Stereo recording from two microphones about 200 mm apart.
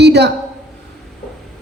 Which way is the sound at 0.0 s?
55° right (ahead or behind).